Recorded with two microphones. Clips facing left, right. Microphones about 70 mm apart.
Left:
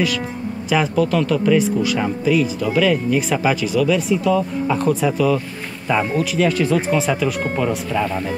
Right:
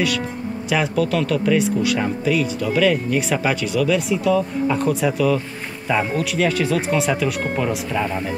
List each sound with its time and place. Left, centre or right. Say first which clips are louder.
0.7 s speech: left 2 dB; centre